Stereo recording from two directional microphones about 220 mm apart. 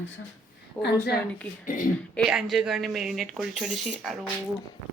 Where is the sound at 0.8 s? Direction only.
50° left (ahead or behind).